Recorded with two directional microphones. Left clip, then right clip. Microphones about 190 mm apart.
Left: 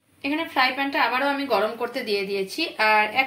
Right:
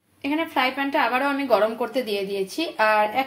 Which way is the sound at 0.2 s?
20° right (ahead or behind).